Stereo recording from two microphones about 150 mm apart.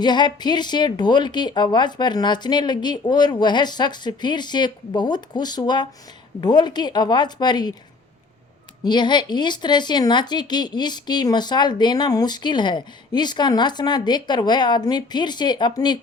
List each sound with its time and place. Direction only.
0.0 s a woman's voice: 30° left (ahead or behind)
8.8 s a woman's voice: 30° left (ahead or behind)